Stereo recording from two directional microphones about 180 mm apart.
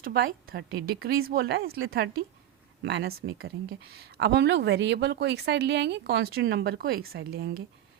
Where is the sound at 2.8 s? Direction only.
75° right (ahead or behind).